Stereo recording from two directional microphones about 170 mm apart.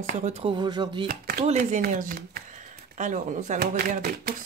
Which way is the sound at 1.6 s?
55° right (ahead or behind).